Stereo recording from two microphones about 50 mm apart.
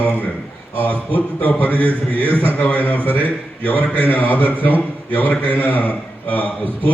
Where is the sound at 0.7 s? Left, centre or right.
Left.